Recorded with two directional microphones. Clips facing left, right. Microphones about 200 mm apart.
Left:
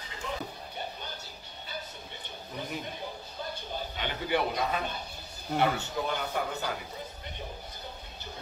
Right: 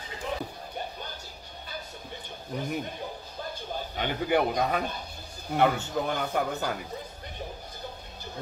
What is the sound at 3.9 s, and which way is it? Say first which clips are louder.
Speech: right 5 dB; 50° right (ahead or behind).